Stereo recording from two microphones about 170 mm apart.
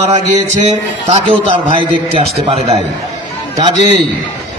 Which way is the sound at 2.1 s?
35° right (ahead or behind).